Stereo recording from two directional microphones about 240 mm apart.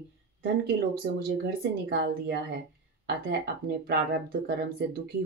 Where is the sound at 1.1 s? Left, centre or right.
Right.